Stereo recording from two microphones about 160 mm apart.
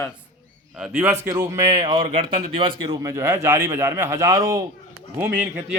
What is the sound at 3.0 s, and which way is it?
A man's voice, 20° right (ahead or behind).